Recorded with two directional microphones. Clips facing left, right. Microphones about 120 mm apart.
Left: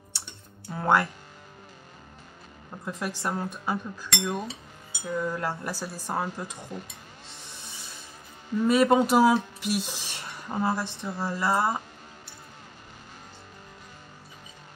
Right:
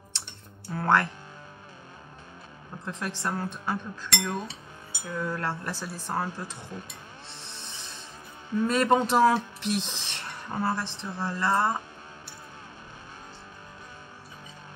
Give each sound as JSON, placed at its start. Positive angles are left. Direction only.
{"t": 0.7, "sound": "speech", "side_deg": 10}
{"t": 2.8, "sound": "speech", "side_deg": 10}
{"t": 7.2, "sound": "a sound", "side_deg": 15}
{"t": 8.5, "sound": "speech", "side_deg": 10}